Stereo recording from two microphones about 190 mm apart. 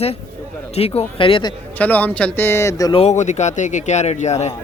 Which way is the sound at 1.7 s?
10° left (ahead or behind).